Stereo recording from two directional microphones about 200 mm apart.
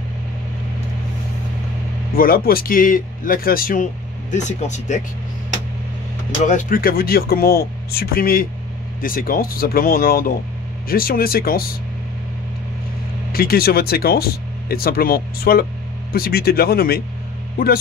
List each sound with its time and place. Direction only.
2.1 s speech: 45° left (ahead or behind)
6.4 s speech: 40° left (ahead or behind)
13.3 s speech: 50° left (ahead or behind)